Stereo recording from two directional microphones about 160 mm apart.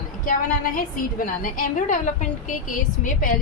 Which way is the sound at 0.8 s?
60° left (ahead or behind).